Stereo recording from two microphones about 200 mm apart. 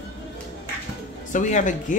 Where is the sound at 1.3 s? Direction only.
40° left (ahead or behind).